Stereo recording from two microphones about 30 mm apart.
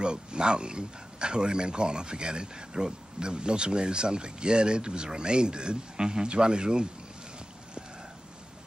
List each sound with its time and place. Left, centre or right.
0.0 s speech: right